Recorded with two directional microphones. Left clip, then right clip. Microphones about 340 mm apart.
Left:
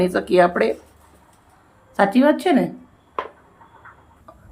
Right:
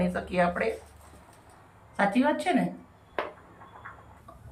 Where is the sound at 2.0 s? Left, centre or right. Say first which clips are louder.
Left 9 dB; centre.